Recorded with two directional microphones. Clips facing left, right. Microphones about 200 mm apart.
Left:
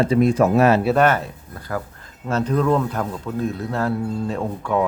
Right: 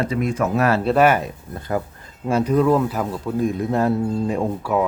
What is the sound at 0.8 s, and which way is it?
A man's voice, 5° right (ahead or behind).